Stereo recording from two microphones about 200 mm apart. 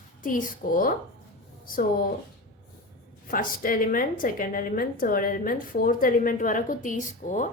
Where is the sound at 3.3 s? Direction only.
45° left (ahead or behind).